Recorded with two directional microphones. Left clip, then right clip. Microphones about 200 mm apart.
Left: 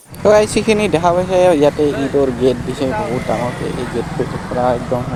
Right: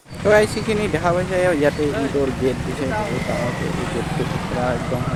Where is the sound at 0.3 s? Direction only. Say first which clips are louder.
Left 5 dB; 35° left (ahead or behind).